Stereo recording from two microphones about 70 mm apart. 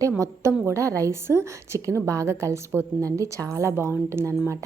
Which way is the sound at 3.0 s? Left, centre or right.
Right.